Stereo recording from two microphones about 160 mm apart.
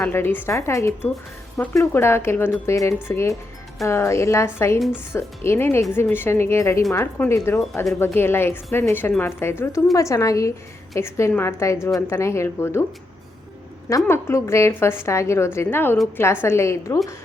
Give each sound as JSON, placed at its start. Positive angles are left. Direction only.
{"t": 0.0, "sound": "a woman's voice", "side_deg": 15}
{"t": 4.8, "sound": "speech", "side_deg": -5}
{"t": 5.1, "sound": "a woman's voice", "side_deg": 15}
{"t": 13.9, "sound": "a woman's voice", "side_deg": 15}